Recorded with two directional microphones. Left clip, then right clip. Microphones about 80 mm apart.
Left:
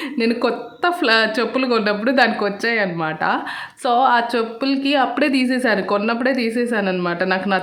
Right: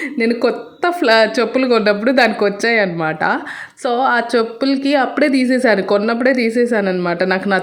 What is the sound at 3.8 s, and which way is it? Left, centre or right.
Speech, centre.